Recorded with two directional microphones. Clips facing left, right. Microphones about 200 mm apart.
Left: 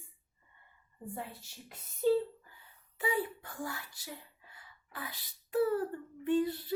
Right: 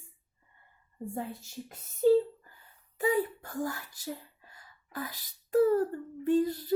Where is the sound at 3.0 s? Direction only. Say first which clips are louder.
Right 6 dB; 40° right (ahead or behind).